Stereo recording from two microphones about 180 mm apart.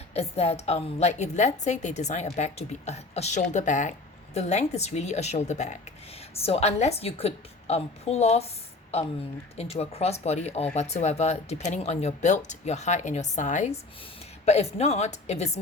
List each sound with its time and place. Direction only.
0.1 s a woman's voice: 35° left (ahead or behind)